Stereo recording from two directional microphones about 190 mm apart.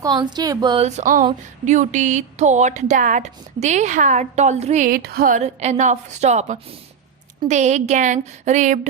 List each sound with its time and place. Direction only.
0.0 s speech: 20° right (ahead or behind)
0.9 s speech: 40° right (ahead or behind)
4.9 s speech: 55° right (ahead or behind)